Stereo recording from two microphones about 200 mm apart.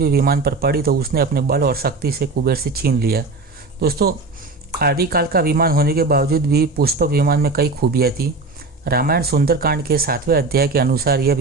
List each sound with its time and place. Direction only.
0.0 s speech: 50° right (ahead or behind)